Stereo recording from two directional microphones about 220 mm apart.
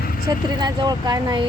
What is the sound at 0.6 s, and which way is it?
Speech, 20° right (ahead or behind).